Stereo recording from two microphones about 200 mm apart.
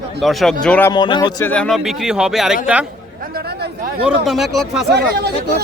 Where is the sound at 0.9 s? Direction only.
20° left (ahead or behind).